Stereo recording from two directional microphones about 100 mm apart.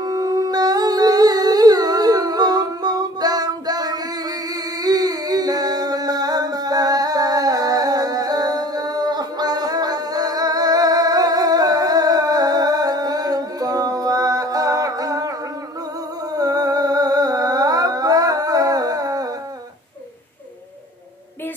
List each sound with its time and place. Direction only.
0.0 s music: 35° right (ahead or behind)